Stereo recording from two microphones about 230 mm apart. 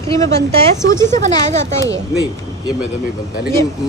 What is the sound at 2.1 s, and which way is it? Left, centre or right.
Speech, centre.